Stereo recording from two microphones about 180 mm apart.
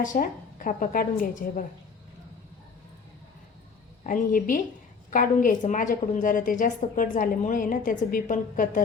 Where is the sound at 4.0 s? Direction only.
50° left (ahead or behind).